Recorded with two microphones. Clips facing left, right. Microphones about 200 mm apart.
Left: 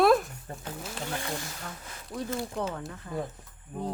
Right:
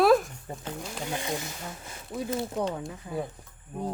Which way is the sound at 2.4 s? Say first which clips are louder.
Right 3 dB; centre (ahead or behind).